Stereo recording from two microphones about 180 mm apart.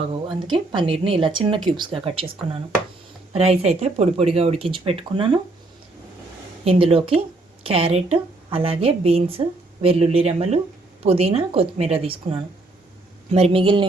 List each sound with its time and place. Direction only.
0.0 s speech: 25° right (ahead or behind)
3.3 s a woman's voice: 35° right (ahead or behind)
6.7 s a woman's voice: 30° right (ahead or behind)